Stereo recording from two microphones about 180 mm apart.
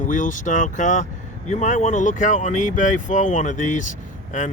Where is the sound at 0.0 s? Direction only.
45° left (ahead or behind).